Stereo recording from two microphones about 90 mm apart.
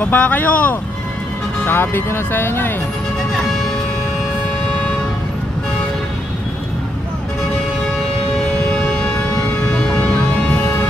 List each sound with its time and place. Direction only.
0.0 s speech: 20° left (ahead or behind)
8.4 s music: 10° left (ahead or behind)